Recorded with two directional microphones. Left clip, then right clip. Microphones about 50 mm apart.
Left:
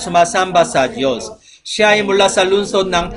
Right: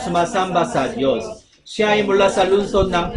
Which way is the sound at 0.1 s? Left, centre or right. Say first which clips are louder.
Left 6 dB; left.